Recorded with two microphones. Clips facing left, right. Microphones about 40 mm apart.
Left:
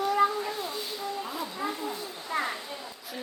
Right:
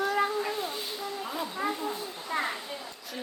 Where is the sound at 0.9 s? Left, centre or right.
Centre.